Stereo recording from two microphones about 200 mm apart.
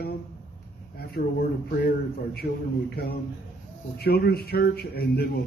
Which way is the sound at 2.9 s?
50° left (ahead or behind).